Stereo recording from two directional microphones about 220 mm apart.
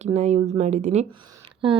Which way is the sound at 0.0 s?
30° right (ahead or behind).